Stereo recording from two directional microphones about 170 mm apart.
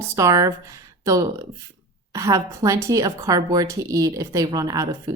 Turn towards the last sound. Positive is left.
turn(degrees=-20)  # may be behind; listen again after turning